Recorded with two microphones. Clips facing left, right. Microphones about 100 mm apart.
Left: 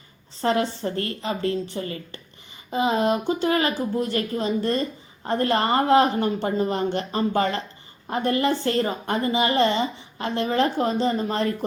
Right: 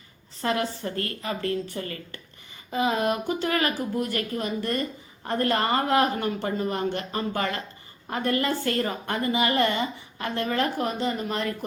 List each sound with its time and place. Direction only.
0.4 s speech: 30° left (ahead or behind)